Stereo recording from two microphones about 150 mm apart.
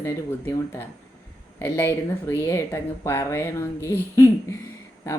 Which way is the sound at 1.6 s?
15° left (ahead or behind).